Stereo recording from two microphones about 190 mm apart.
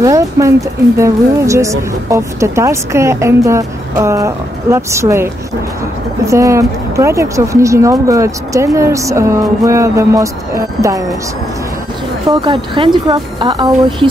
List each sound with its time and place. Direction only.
0.0 s speech: 15° right (ahead or behind)
12.3 s speech: 25° right (ahead or behind)